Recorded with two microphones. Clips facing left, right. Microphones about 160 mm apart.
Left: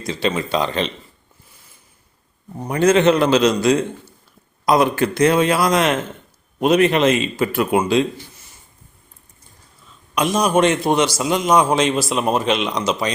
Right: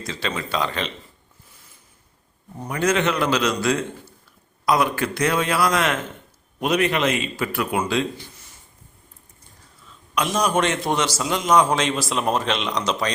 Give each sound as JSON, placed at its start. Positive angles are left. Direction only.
{"t": 0.0, "sound": "speech", "side_deg": 15}
{"t": 2.6, "sound": "speech", "side_deg": 25}
{"t": 10.2, "sound": "a man's voice", "side_deg": 15}